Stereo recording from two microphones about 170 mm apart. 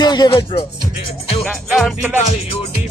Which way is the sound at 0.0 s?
25° left (ahead or behind).